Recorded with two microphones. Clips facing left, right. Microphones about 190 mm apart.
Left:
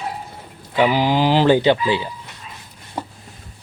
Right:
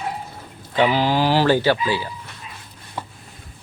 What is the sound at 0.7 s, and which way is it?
Speech, 15° left (ahead or behind).